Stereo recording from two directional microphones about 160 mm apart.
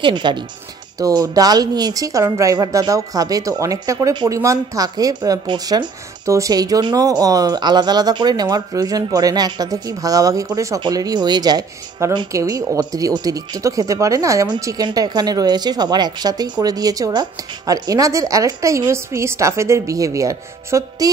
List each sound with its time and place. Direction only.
0.0 s a woman's voice: 30° right (ahead or behind)